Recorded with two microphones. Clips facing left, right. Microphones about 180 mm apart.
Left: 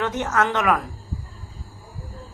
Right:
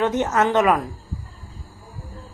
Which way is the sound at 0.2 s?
20° right (ahead or behind).